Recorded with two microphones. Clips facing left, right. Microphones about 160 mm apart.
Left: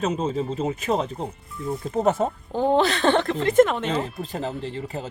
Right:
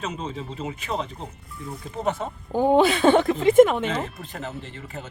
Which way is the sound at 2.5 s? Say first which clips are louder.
Right 3 dB; 10° right (ahead or behind).